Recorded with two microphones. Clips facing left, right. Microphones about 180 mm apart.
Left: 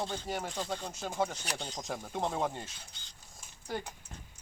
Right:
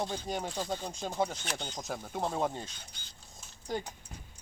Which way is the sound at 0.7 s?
15° right (ahead or behind).